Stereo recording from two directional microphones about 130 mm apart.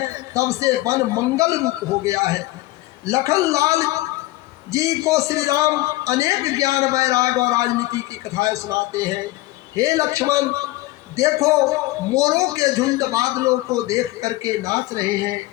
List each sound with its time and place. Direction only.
0.3 s a man's voice: 25° right (ahead or behind)